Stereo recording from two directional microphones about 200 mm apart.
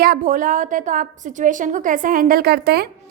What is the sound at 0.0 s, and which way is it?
A woman's voice, 45° right (ahead or behind).